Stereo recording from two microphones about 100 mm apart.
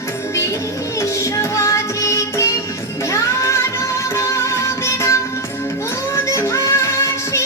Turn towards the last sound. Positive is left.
turn(degrees=30)  # may be behind; listen again after turning